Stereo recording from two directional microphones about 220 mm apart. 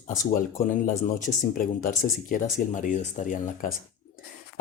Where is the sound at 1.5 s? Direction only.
40° left (ahead or behind).